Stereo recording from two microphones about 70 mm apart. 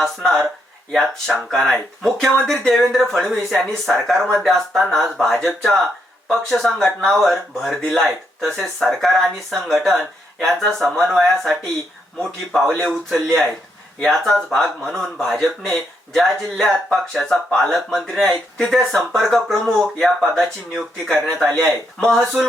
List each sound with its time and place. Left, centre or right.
0.0 s speech: centre